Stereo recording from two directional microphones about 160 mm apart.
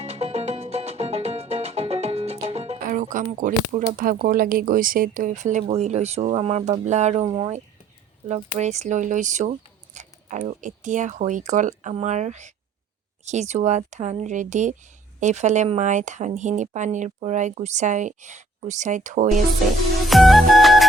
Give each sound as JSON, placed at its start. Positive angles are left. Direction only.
{"t": 0.0, "sound": "music", "side_deg": -40}
{"t": 2.8, "sound": "music", "side_deg": -55}
{"t": 3.3, "sound": "speech", "side_deg": -55}
{"t": 7.3, "sound": "speech", "side_deg": -25}
{"t": 8.3, "sound": "speech", "side_deg": -45}
{"t": 20.1, "sound": "music", "side_deg": 0}